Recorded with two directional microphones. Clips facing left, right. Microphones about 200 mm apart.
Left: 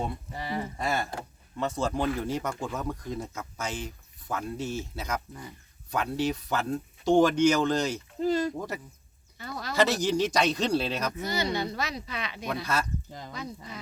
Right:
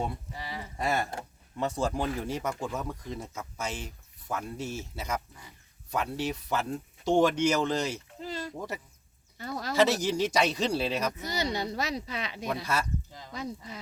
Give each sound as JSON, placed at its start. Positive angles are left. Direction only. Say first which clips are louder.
{"t": 0.3, "sound": "speech", "louder": "left 7 dB", "side_deg": 50}
{"t": 0.8, "sound": "speech", "louder": "right 5 dB", "side_deg": -15}
{"t": 8.2, "sound": "a sound", "louder": "left 12 dB", "side_deg": 45}
{"t": 8.5, "sound": "speech", "louder": "left 2 dB", "side_deg": 0}
{"t": 9.4, "sound": "speech", "louder": "right 2 dB", "side_deg": -40}
{"t": 9.7, "sound": "speech", "louder": "even", "side_deg": -5}
{"t": 11.2, "sound": "speech", "louder": "left 2 dB", "side_deg": -40}
{"t": 12.5, "sound": "speech", "louder": "left 2 dB", "side_deg": -10}
{"t": 13.1, "sound": "honk", "louder": "left 5 dB", "side_deg": 50}